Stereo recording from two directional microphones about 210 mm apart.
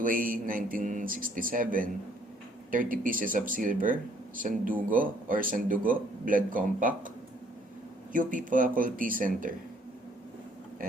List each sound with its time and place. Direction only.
0.0 s speech: 40° right (ahead or behind)
8.1 s speech: 40° right (ahead or behind)